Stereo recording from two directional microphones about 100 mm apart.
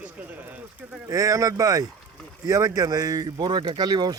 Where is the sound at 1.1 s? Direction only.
35° right (ahead or behind).